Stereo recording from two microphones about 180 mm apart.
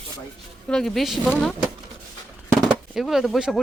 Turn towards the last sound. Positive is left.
turn(degrees=0)  # may be behind; listen again after turning